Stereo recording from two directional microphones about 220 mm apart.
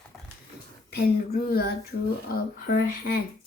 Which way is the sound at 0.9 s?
45° left (ahead or behind).